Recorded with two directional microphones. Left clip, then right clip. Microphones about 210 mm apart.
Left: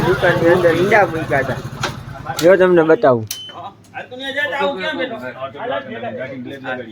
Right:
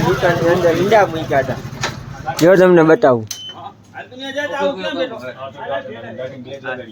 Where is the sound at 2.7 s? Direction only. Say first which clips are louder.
Right 1 dB; 25° right (ahead or behind).